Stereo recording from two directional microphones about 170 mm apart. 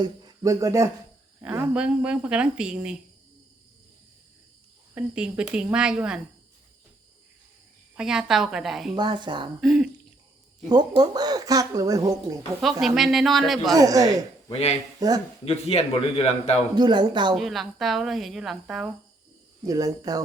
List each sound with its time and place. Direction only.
0.0 s speech: 25° right (ahead or behind); by 3.0 s 5° right (ahead or behind)
4.9 s speech: 5° right (ahead or behind)
7.9 s speech: 5° right (ahead or behind)
9.0 s speech: 25° right (ahead or behind)
9.6 s speech: centre (ahead or behind)
10.7 s speech: 25° right (ahead or behind)
12.8 s speech: centre (ahead or behind)
13.7 s speech: 20° right (ahead or behind)
14.5 s a man's voice: 40° left (ahead or behind)
14.9 s speech: 20° right (ahead or behind)
15.4 s a man's voice: 35° left (ahead or behind)
16.7 s speech: 25° right (ahead or behind)
17.3 s speech: centre (ahead or behind)
19.6 s speech: 20° right (ahead or behind)